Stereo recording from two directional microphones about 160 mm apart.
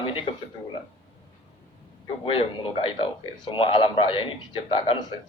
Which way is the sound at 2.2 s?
35° left (ahead or behind).